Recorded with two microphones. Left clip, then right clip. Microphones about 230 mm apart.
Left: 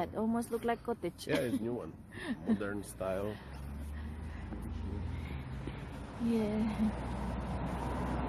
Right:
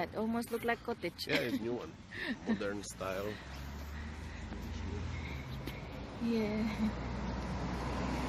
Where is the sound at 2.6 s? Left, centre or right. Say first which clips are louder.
Left 1 dB; left.